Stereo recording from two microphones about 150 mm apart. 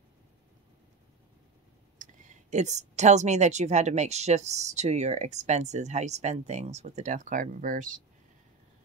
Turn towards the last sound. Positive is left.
turn(degrees=-60)  # may be behind; listen again after turning